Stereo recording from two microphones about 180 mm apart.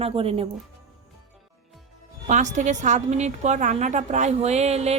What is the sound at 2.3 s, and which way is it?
Speech, 40° right (ahead or behind).